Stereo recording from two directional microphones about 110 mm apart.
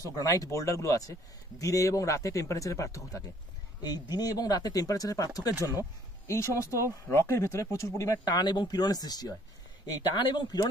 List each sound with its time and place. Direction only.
0.0 s speech: 30° left (ahead or behind)